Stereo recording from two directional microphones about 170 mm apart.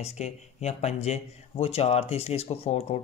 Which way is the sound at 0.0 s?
40° left (ahead or behind).